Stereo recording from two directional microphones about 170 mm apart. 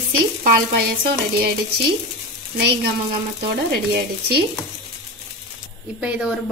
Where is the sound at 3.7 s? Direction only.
70° right (ahead or behind).